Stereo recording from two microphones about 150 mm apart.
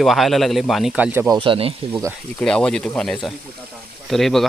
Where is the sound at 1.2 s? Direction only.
30° right (ahead or behind).